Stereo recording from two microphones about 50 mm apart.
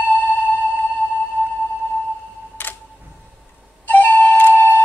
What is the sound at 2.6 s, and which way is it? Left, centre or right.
Camera, left.